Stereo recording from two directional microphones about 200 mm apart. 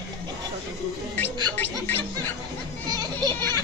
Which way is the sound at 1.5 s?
10° left (ahead or behind).